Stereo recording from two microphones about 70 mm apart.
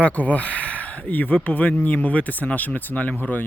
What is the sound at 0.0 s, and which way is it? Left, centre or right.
Speech, left.